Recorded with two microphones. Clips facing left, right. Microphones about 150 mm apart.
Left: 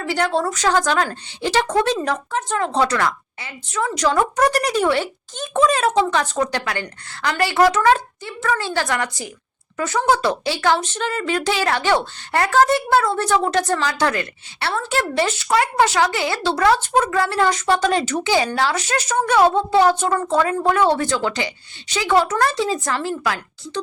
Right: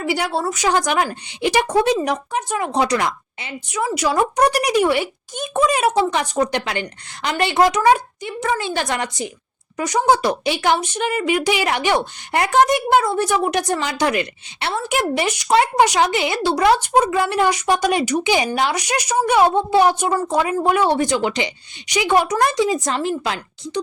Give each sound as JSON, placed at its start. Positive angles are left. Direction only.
{"t": 0.0, "sound": "speech", "side_deg": -10}